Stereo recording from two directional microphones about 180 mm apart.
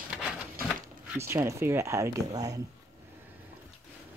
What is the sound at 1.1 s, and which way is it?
Speech, 15° right (ahead or behind).